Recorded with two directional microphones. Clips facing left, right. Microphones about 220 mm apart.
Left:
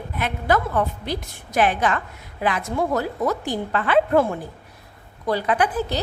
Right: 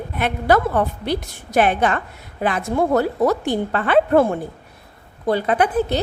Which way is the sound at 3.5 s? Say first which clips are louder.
Right 3 dB; 35° right (ahead or behind).